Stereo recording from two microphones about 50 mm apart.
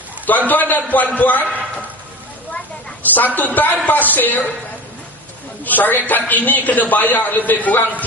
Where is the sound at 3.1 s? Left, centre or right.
Left.